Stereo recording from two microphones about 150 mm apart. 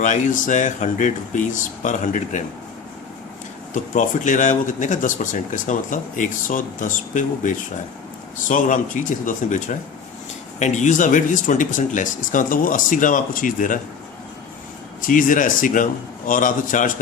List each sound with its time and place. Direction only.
0.0 s speech: 60° left (ahead or behind)
3.9 s speech: 55° left (ahead or behind)
15.0 s speech: 65° left (ahead or behind)